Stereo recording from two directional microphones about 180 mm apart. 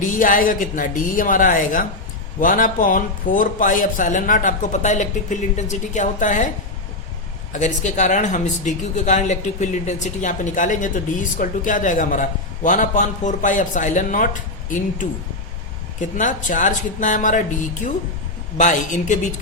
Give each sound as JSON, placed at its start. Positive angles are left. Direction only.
{"t": 0.0, "sound": "speech", "side_deg": 50}
{"t": 7.5, "sound": "speech", "side_deg": 40}
{"t": 16.0, "sound": "speech", "side_deg": 45}
{"t": 18.5, "sound": "speech", "side_deg": 45}